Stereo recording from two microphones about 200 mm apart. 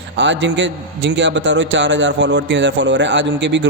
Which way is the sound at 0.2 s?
65° right (ahead or behind).